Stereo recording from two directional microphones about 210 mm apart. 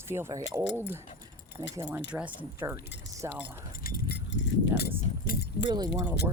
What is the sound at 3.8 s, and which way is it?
Speech, 45° left (ahead or behind).